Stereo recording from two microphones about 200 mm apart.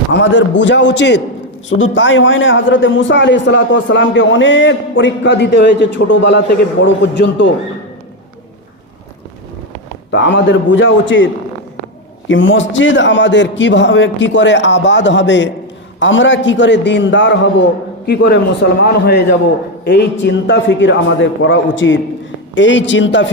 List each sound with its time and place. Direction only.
0.1 s a man's voice: 60° left (ahead or behind)
10.1 s a man's voice: 60° left (ahead or behind)
12.3 s a man's voice: 70° left (ahead or behind)